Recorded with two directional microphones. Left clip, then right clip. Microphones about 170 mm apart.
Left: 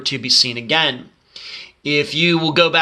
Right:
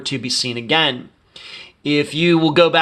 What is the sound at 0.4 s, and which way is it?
Speech, 30° right (ahead or behind).